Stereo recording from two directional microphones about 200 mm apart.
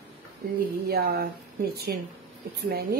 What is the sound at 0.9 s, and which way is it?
Speech, 50° right (ahead or behind).